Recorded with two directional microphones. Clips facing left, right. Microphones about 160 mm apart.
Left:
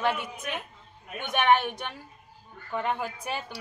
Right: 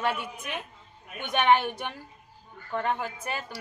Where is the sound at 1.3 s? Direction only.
15° right (ahead or behind).